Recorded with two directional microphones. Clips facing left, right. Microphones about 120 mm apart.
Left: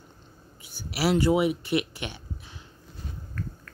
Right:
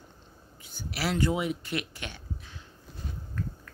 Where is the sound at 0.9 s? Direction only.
10° left (ahead or behind).